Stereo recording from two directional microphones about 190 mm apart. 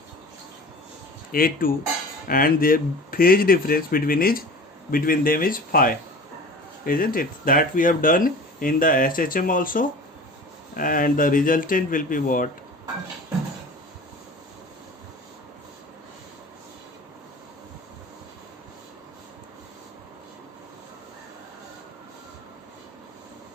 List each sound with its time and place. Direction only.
1.3 s speech: 50° left (ahead or behind)